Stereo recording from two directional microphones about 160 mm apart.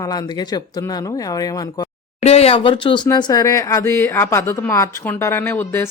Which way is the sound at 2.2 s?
40° left (ahead or behind).